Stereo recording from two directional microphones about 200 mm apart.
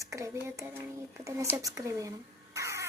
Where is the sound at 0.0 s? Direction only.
15° right (ahead or behind).